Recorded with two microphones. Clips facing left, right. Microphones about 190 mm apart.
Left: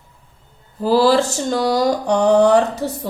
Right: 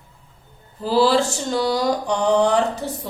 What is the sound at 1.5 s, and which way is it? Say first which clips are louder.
Mantra: left 3 dB; 45° left (ahead or behind).